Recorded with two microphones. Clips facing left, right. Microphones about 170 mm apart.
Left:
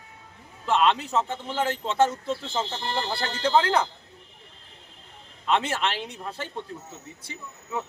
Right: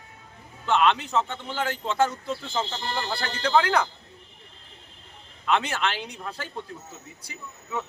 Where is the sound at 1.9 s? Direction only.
25° left (ahead or behind).